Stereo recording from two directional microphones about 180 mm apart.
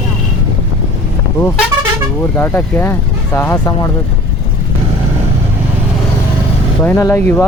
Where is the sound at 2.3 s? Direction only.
15° left (ahead or behind).